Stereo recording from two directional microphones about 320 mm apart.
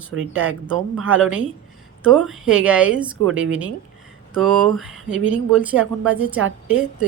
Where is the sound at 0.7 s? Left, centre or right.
Right.